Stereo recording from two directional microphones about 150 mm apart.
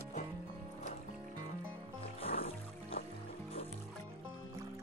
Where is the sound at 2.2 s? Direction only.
40° left (ahead or behind).